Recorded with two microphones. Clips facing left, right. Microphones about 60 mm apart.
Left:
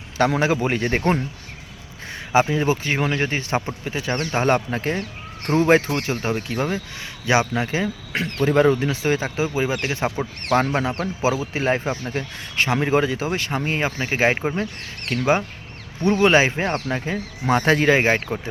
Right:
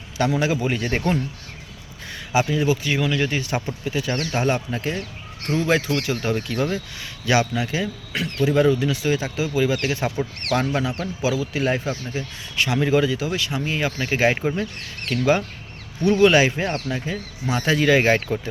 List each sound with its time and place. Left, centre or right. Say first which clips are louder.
0.2 s speech: left 2 dB; left
2.3 s speech: left 2 dB; left
4.4 s speech: left 3 dB; left
5.9 s speech: right 1 dB; left
13.9 s speech: right 1 dB; left
17.9 s speech: right 1 dB; left